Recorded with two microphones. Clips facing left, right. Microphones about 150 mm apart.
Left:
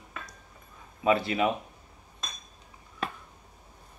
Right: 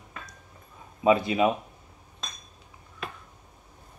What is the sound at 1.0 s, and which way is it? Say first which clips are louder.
Speech: right 3 dB; 20° right (ahead or behind).